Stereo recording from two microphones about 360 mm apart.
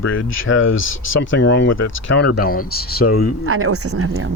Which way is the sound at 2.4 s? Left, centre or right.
Left.